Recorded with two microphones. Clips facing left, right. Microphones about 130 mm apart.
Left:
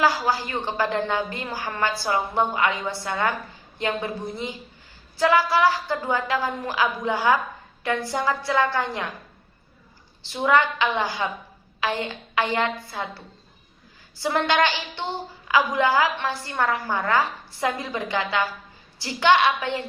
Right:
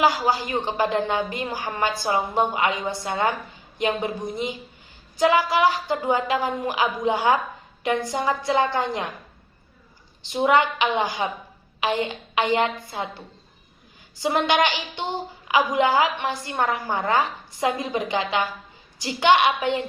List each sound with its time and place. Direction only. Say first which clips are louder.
0.0 s a woman's voice: right 1 dB; 15° right (ahead or behind)
10.2 s a woman's voice: right 1 dB; 20° right (ahead or behind)